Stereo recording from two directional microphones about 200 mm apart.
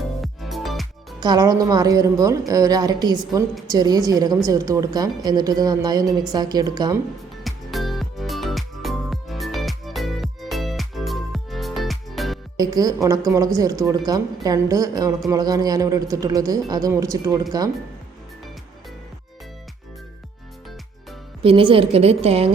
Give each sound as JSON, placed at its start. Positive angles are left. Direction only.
{"t": 0.2, "sound": "music", "side_deg": 0}
{"t": 1.2, "sound": "a man's voice", "side_deg": -20}
{"t": 7.4, "sound": "music", "side_deg": 0}
{"t": 12.5, "sound": "a man's voice", "side_deg": -20}
{"t": 21.4, "sound": "a woman's voice", "side_deg": -25}